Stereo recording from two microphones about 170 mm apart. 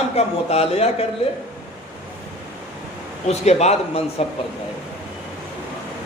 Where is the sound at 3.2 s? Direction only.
40° left (ahead or behind).